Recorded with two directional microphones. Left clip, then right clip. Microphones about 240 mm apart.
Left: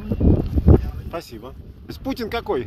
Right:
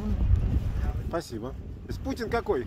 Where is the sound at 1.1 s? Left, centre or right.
Centre.